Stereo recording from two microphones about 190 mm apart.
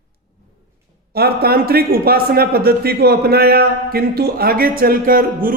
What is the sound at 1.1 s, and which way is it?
A man's voice, 55° right (ahead or behind).